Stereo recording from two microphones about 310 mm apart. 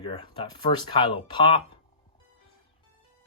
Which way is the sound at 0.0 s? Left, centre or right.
Centre.